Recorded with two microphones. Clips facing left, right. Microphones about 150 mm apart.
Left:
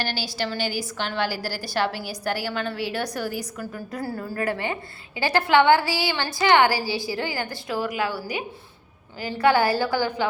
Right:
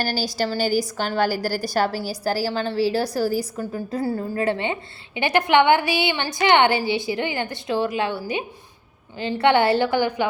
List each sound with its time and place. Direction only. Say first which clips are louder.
0.0 s a woman's voice: right 4 dB; 40° right (ahead or behind); by 10.2 s 20° right (ahead or behind)